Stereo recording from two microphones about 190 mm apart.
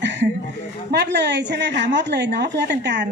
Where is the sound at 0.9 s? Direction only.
65° right (ahead or behind).